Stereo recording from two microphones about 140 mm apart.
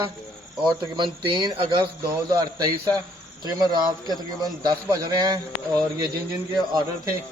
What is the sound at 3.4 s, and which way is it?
A man's voice, 30° right (ahead or behind).